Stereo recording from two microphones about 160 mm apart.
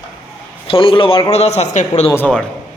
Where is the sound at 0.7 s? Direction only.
35° left (ahead or behind).